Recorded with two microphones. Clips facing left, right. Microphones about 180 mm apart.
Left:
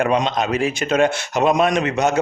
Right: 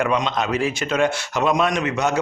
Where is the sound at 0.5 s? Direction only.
20° left (ahead or behind).